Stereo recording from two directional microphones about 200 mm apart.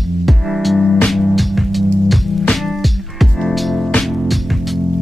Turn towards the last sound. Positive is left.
turn(degrees=0)  # may be behind; listen again after turning